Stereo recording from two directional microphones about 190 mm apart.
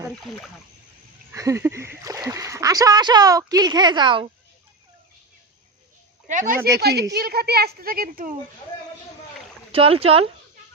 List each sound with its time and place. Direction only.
1.3 s speech: 15° right (ahead or behind)
6.2 s speech: 45° right (ahead or behind)
6.7 s a woman's voice: 60° right (ahead or behind)
9.7 s speech: 30° right (ahead or behind)